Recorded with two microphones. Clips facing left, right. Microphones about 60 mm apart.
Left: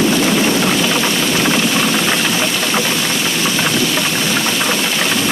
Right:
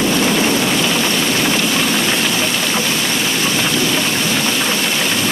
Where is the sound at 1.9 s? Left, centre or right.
Centre.